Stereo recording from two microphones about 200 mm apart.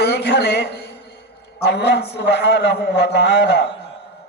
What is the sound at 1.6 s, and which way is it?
A man's voice, 60° left (ahead or behind).